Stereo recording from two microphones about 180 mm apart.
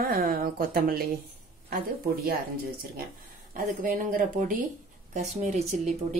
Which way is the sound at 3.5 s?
50° right (ahead or behind).